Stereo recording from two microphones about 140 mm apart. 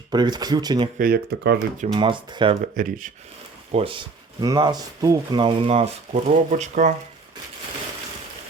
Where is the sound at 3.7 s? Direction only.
40° right (ahead or behind); by 6.9 s 60° right (ahead or behind).